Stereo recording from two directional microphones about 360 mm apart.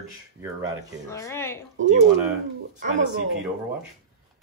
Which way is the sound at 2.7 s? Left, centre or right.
Centre.